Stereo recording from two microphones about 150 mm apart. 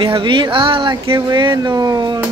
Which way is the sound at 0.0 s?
35° right (ahead or behind).